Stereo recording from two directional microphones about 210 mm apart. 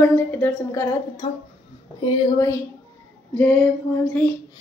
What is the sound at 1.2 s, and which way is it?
Speech, 30° left (ahead or behind).